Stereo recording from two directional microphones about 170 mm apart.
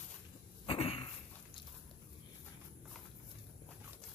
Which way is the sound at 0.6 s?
30° left (ahead or behind).